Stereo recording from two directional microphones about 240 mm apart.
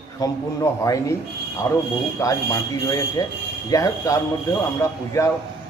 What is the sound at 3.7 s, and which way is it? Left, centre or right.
A man's voice, centre.